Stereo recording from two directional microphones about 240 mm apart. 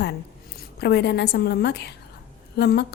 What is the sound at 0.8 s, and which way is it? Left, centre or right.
A woman's voice, left.